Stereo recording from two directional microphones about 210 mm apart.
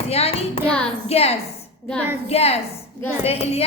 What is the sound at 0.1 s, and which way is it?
A woman's voice, 30° left (ahead or behind).